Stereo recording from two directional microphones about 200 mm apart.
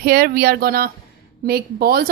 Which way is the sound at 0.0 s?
50° right (ahead or behind).